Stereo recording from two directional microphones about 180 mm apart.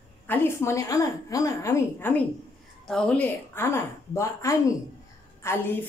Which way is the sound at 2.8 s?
5° left (ahead or behind).